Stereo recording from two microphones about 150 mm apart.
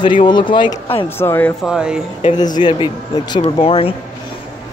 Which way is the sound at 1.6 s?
5° right (ahead or behind).